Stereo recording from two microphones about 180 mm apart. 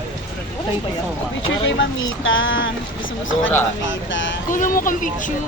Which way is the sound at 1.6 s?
90° left.